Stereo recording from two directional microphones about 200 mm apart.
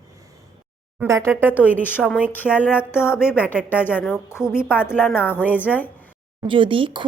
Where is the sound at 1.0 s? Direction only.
15° right (ahead or behind).